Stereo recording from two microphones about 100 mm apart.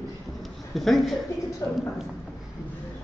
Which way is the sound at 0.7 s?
Centre (ahead or behind).